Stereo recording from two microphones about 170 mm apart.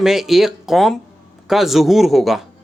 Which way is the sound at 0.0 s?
Centre (ahead or behind).